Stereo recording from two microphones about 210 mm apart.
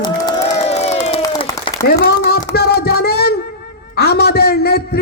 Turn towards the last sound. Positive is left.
turn(degrees=50)  # may be behind; listen again after turning